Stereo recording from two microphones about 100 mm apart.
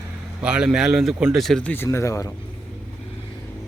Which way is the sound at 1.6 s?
20° left (ahead or behind).